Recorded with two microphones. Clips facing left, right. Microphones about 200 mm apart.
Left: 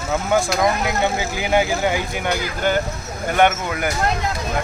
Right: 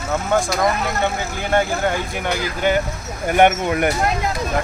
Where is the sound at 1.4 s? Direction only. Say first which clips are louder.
Even; 10° left (ahead or behind).